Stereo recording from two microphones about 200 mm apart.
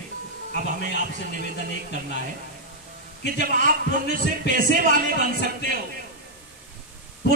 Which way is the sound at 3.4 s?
45° right (ahead or behind).